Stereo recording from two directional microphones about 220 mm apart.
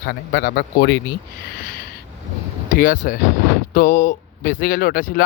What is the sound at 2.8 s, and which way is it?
Speech, 40° left (ahead or behind).